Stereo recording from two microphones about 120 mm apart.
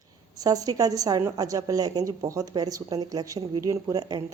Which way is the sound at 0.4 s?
30° right (ahead or behind).